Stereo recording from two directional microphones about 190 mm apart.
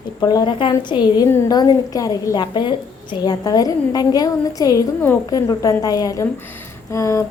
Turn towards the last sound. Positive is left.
turn(degrees=15)  # may be behind; listen again after turning